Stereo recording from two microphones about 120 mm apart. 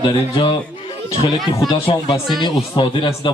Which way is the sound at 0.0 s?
40° left (ahead or behind).